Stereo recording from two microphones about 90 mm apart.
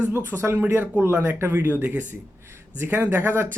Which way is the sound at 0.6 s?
25° right (ahead or behind).